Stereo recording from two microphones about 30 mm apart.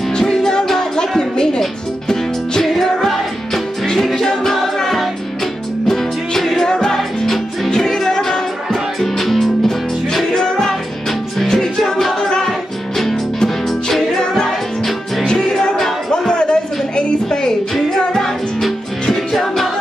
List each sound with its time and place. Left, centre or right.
0.2 s music: centre
4.0 s music: centre
7.0 s music: centre
7.7 s music: centre
10.3 s music: left
10.7 s music: centre
12.2 s music: left
12.4 s music: centre
16.1 s a sound: left
17.3 s music: left
19.4 s music: centre